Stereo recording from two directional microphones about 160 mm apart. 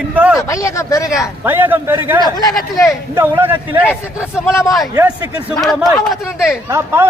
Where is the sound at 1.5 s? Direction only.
15° right (ahead or behind).